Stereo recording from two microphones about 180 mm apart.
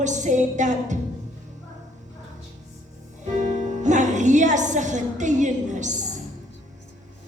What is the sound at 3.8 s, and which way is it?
Music, 40° right (ahead or behind).